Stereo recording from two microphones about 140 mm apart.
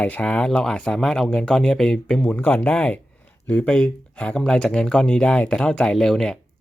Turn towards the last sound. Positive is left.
turn(degrees=5)  # may be behind; listen again after turning